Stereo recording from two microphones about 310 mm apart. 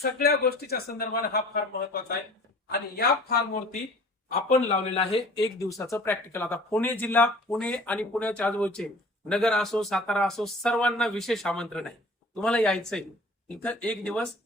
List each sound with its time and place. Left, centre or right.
0.0 s speech: left; by 14.3 s centre